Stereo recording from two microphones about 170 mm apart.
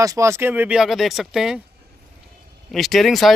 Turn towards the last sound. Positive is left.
turn(degrees=0)  # may be behind; listen again after turning